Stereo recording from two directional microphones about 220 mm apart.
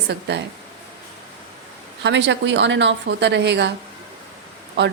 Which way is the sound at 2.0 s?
55° right (ahead or behind).